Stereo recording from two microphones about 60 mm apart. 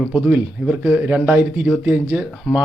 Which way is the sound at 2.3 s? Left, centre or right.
Centre.